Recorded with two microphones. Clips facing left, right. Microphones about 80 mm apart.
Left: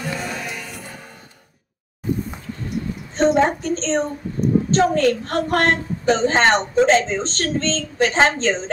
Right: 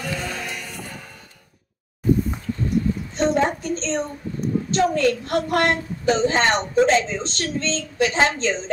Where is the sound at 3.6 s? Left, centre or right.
Left.